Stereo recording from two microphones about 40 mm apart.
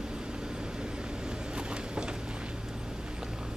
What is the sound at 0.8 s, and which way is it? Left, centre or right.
Vehicle, right.